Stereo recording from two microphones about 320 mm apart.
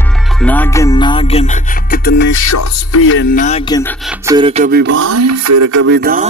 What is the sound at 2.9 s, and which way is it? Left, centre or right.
Music, left.